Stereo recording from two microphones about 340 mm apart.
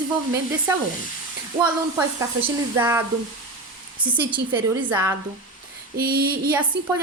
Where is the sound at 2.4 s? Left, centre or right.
Centre.